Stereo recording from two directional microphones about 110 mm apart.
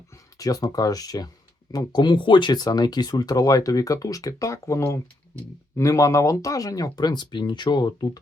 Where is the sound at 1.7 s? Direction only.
40° left (ahead or behind).